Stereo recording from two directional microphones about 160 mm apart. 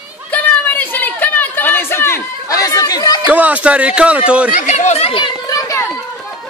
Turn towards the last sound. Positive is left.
turn(degrees=20)  # may be behind; listen again after turning